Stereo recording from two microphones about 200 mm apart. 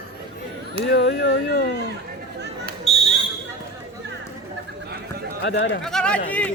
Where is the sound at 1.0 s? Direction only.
60° left (ahead or behind).